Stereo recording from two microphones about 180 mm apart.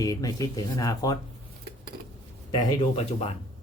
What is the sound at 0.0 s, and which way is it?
Speech, 20° left (ahead or behind).